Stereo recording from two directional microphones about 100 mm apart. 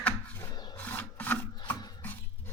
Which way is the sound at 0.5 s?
45° left (ahead or behind).